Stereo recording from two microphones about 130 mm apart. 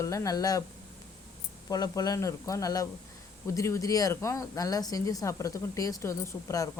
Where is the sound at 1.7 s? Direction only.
30° left (ahead or behind).